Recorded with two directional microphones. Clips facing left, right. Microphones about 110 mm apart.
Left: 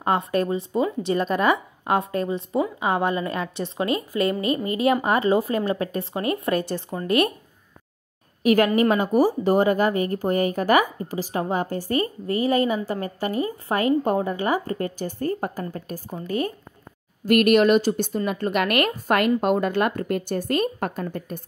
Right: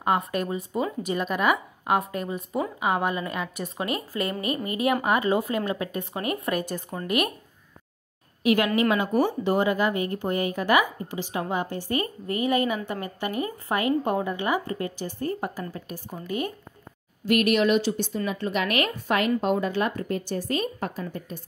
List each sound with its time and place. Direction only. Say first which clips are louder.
0.0 s a woman's voice: left 3 dB; 30° left (ahead or behind)
8.4 s a woman's voice: left 4 dB; 45° left (ahead or behind)
17.2 s a woman's voice: left 5 dB; 50° left (ahead or behind)